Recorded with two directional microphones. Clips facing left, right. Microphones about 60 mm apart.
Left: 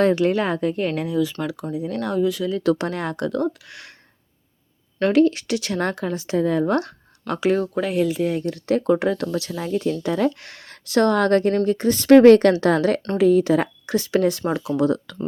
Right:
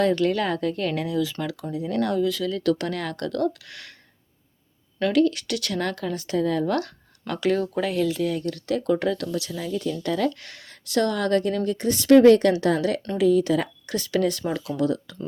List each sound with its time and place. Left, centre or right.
0.2 s speech: centre
0.9 s speech: centre; by 3.2 s left
3.2 s speech: centre
5.1 s speech: left
7.3 s speech: centre
8.2 s speech: left
10.0 s speech: left
12.1 s speech: left